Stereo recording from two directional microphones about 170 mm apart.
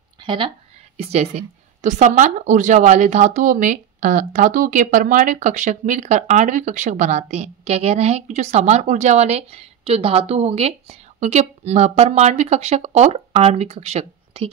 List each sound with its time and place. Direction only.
0.2 s a woman's voice: 25° right (ahead or behind)
0.9 s speech: 35° right (ahead or behind)